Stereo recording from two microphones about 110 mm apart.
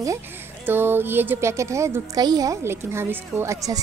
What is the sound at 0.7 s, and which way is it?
Speech, 20° right (ahead or behind).